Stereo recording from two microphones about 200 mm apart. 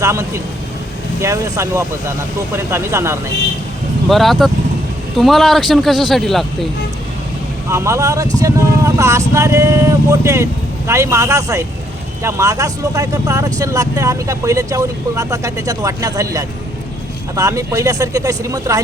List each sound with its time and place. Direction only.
0.0 s speech: 15° right (ahead or behind)
4.1 s speech: centre (ahead or behind)
7.7 s speech: 15° right (ahead or behind)